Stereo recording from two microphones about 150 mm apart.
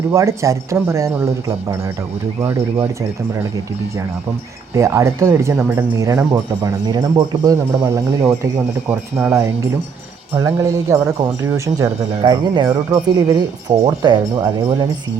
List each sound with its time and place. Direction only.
0.1 s speech: 20° right (ahead or behind)
4.7 s speech: 20° right (ahead or behind)